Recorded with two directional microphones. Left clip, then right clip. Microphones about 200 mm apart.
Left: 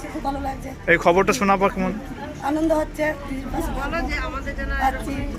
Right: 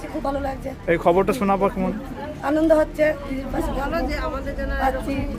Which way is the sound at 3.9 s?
30° right (ahead or behind).